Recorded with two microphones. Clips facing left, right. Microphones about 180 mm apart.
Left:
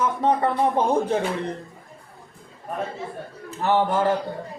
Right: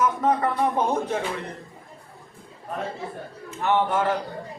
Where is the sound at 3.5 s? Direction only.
35° left (ahead or behind).